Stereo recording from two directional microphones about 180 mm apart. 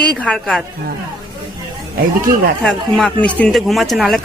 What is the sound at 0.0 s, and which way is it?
Speech, 5° left (ahead or behind).